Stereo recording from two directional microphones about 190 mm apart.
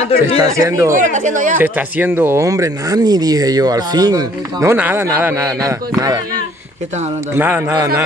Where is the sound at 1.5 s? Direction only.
10° right (ahead or behind).